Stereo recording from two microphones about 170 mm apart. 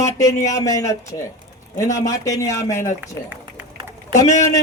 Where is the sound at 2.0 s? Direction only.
20° left (ahead or behind).